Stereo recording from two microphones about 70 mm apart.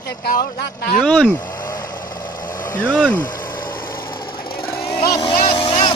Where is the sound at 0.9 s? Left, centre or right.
Centre.